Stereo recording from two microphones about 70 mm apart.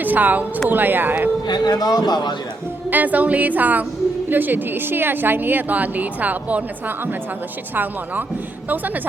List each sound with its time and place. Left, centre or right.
0.0 s a woman's voice: right
1.5 s a man's voice: left
2.9 s a woman's voice: right